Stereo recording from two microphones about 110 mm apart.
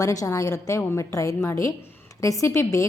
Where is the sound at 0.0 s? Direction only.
30° left (ahead or behind).